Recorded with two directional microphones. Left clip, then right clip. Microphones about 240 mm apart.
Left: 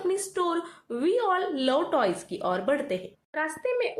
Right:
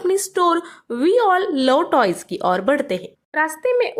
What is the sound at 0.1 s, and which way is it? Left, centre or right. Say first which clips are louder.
Speech: right 11 dB; right.